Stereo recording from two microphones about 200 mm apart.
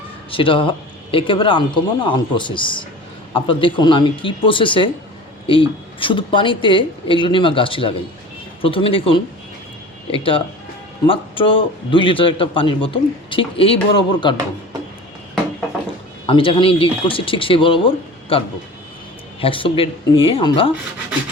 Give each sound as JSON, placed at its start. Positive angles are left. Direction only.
{"t": 0.3, "sound": "a man's voice", "side_deg": 25}
{"t": 16.2, "sound": "a man's voice", "side_deg": 25}